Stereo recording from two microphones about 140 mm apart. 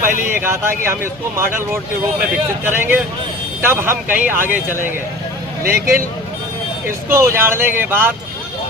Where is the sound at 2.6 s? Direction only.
15° right (ahead or behind).